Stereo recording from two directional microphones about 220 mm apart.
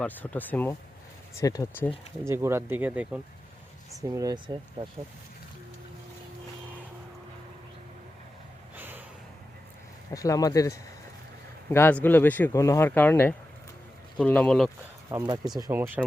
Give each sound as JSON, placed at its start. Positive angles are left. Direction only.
{"t": 0.0, "sound": "speech", "side_deg": 10}
{"t": 2.2, "sound": "speech", "side_deg": -10}
{"t": 8.7, "sound": "a sound", "side_deg": -10}
{"t": 10.1, "sound": "speech", "side_deg": 15}
{"t": 15.1, "sound": "speech", "side_deg": -15}